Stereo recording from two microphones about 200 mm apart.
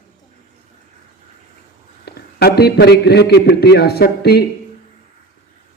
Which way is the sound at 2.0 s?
55° left (ahead or behind).